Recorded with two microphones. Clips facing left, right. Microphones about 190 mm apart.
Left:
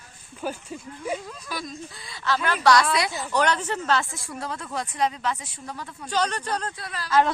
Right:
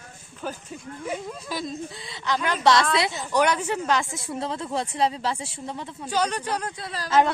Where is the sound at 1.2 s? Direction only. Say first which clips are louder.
Right 3 dB; 25° right (ahead or behind).